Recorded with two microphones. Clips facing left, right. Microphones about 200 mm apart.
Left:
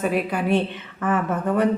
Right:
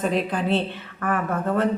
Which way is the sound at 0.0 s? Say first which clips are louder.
Left 1 dB; 10° left (ahead or behind).